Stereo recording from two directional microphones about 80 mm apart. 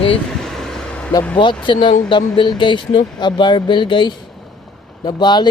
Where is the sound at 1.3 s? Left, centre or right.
Left.